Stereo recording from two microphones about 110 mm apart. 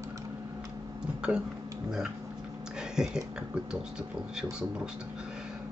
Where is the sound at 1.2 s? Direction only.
10° right (ahead or behind).